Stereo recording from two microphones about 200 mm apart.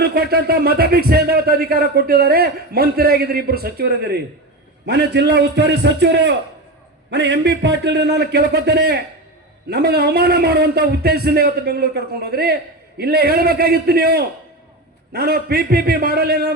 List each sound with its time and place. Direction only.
0.0 s a man's voice: 50° right (ahead or behind)